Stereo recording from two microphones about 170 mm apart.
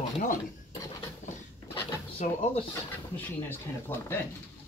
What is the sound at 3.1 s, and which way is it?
Speech, 10° left (ahead or behind).